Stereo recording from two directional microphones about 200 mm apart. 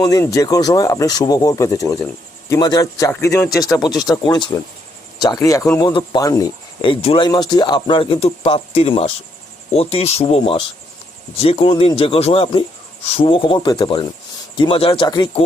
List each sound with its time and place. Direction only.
0.0 s speech: 15° left (ahead or behind)